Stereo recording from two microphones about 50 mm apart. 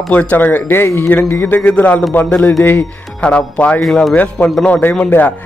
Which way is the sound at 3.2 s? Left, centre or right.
Left.